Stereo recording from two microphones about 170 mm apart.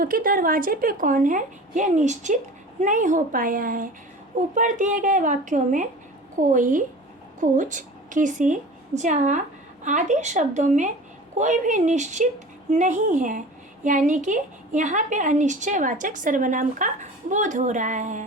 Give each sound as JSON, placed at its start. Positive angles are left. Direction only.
{"t": 0.0, "sound": "a woman's voice", "side_deg": -55}